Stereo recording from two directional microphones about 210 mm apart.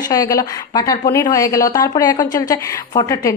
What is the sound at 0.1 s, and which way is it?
A woman's voice, 15° left (ahead or behind).